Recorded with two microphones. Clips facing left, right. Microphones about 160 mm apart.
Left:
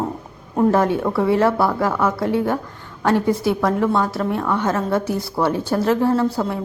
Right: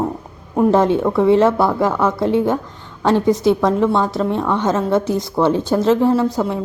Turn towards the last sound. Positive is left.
turn(degrees=-15)  # may be behind; listen again after turning